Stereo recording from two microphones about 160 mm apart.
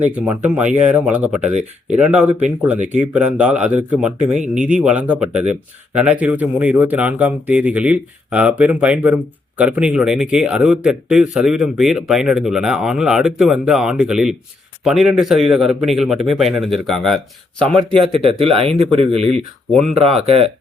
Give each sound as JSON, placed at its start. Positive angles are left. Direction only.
{"t": 0.0, "sound": "speech", "side_deg": -10}
{"t": 1.4, "sound": "speech", "side_deg": -45}
{"t": 2.0, "sound": "speech", "side_deg": -10}
{"t": 2.7, "sound": "speech", "side_deg": -50}
{"t": 3.1, "sound": "a man's voice", "side_deg": -10}
{"t": 17.9, "sound": "speech", "side_deg": -35}